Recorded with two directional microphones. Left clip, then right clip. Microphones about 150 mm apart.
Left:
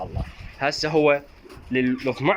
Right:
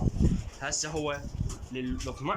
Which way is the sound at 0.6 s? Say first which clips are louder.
Left 13 dB; 30° left (ahead or behind).